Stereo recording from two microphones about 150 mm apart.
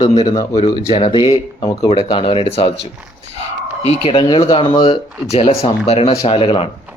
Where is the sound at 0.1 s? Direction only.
40° left (ahead or behind).